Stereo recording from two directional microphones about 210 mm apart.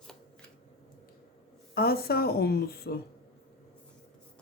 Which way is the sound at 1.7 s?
45° left (ahead or behind).